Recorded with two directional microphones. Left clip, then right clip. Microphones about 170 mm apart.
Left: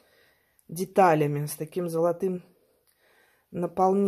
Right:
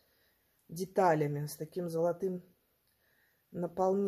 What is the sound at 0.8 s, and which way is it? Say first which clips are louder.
Speech: left 8 dB; 30° left (ahead or behind).